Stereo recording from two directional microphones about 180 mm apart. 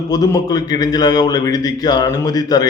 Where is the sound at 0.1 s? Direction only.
20° left (ahead or behind).